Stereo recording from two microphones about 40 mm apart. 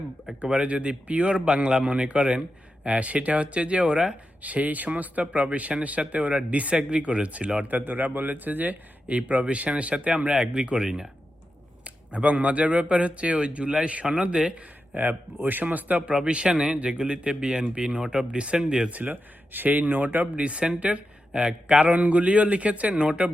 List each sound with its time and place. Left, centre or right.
0.4 s speech: right
4.4 s speech: right
5.7 s speech: centre
6.1 s speech: right
7.6 s speech: right
9.5 s speech: right
12.1 s speech: right
14.9 s speech: right
15.6 s speech: right
20.3 s speech: right
21.8 s speech: right